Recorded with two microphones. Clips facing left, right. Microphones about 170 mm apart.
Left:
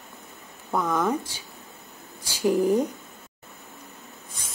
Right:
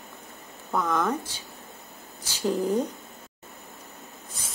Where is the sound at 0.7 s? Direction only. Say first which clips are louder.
Left 1 dB; 10° left (ahead or behind).